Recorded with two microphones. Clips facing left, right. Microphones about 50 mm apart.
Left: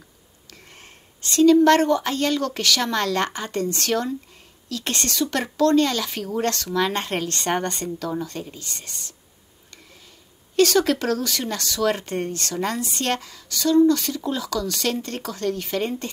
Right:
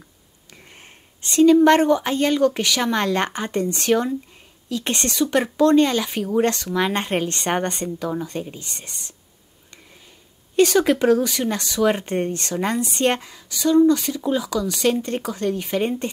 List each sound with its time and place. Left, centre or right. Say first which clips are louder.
0.5 s speech: right 1 dB; right
10.5 s speech: right 2 dB; centre